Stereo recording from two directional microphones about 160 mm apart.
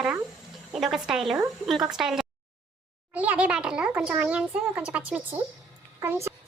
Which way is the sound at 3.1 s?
10° right (ahead or behind).